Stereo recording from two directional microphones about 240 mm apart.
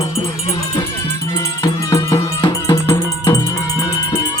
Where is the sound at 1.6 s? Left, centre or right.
Centre.